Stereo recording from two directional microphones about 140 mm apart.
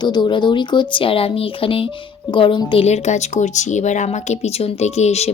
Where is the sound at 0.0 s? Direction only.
30° left (ahead or behind).